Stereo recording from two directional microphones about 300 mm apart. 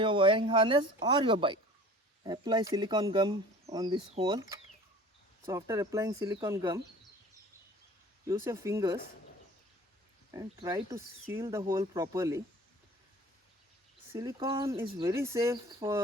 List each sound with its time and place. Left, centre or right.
0.0 s speech: centre
8.2 s speech: centre
10.3 s speech: centre
14.1 s speech: centre